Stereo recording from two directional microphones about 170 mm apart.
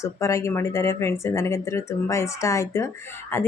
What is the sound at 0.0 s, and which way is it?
Speech, 15° left (ahead or behind).